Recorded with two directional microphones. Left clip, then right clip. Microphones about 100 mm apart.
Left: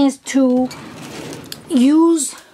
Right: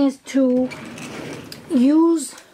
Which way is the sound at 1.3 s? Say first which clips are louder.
Left 3 dB; 25° left (ahead or behind).